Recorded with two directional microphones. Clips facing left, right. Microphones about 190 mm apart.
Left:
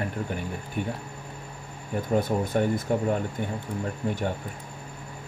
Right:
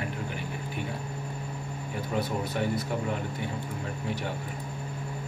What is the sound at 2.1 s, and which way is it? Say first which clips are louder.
Speech: left 5 dB; 50° left (ahead or behind).